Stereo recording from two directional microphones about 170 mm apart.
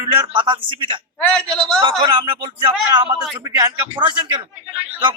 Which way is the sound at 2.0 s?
30° right (ahead or behind).